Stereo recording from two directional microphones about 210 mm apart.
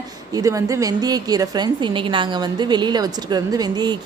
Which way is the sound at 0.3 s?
15° right (ahead or behind).